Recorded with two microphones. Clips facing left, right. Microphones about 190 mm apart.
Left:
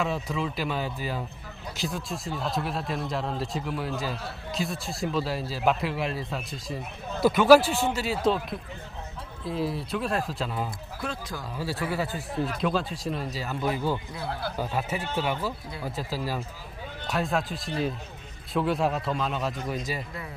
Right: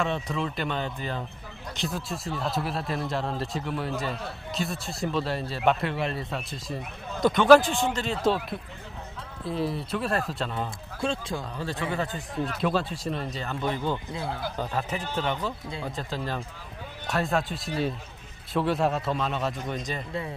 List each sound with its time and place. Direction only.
0.0 s speech: 5° left (ahead or behind)
11.0 s speech: 25° right (ahead or behind)
11.5 s speech: 5° left (ahead or behind)
14.1 s speech: 20° right (ahead or behind)
14.5 s speech: 10° left (ahead or behind)